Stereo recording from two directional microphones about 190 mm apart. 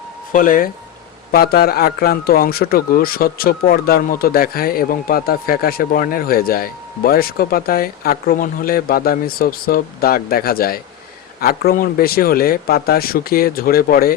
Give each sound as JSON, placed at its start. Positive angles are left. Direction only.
{"t": 0.3, "sound": "a man's voice", "side_deg": 45}